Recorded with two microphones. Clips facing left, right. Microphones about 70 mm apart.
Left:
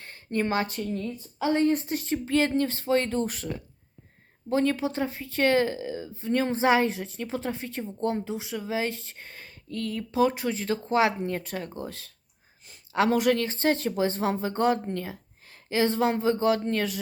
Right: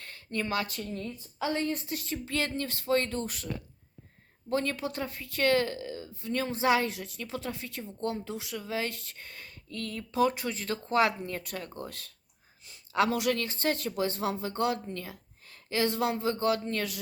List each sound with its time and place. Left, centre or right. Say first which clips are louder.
0.0 s a sound: left 6 dB; left
0.4 s a woman's voice: left 4 dB; left
3.2 s a woman's voice: left 5 dB; left
4.6 s a woman's voice: left 7 dB; left
13.1 s a woman's voice: left 6 dB; left